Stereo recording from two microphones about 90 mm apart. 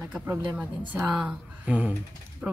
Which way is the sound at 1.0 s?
10° right (ahead or behind).